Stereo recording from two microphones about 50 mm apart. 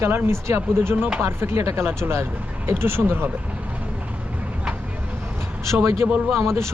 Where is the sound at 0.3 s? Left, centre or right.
Right.